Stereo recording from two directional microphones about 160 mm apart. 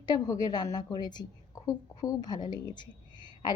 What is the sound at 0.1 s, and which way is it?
A woman's voice, 25° left (ahead or behind).